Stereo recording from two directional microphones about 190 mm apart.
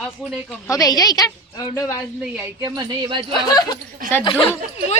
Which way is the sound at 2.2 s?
5° right (ahead or behind).